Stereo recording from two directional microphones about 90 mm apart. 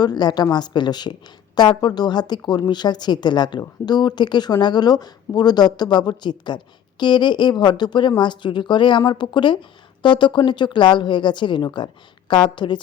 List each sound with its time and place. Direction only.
0.0 s speech: 50° left (ahead or behind)